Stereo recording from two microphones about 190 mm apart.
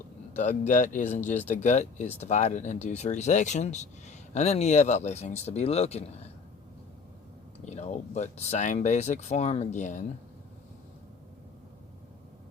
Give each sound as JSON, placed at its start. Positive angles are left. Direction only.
{"t": 0.3, "sound": "speech", "side_deg": 40}
{"t": 7.6, "sound": "speech", "side_deg": 35}